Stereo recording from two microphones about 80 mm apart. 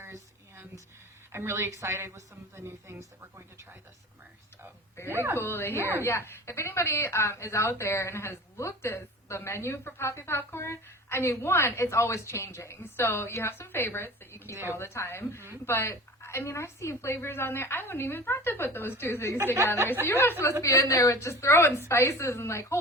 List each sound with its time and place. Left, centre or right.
0.0 s a sound: right
1.3 s a woman's voice: right
5.1 s a woman's voice: right
5.4 s a woman's voice: left
20.0 s a woman's voice: right
20.4 s a woman's voice: left